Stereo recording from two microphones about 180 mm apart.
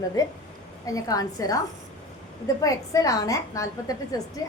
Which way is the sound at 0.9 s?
20° left (ahead or behind).